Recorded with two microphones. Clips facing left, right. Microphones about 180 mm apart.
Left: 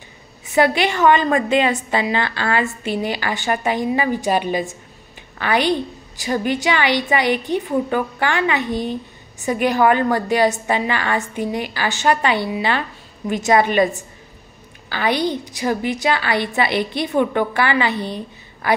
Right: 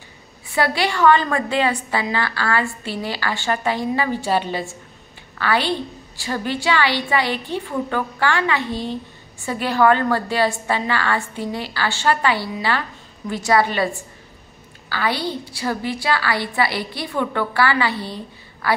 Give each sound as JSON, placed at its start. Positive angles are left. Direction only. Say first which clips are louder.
{"t": 0.5, "sound": "a woman's voice", "louder": "left 4 dB", "side_deg": 20}
{"t": 14.9, "sound": "a woman's voice", "louder": "left 4 dB", "side_deg": 20}